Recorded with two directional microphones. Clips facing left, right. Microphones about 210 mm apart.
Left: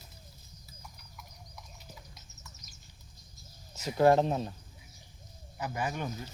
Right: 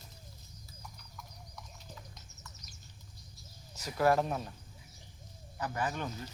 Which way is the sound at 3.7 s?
25° left (ahead or behind).